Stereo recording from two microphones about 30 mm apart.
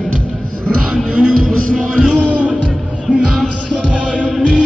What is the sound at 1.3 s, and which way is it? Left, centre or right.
Speech, left.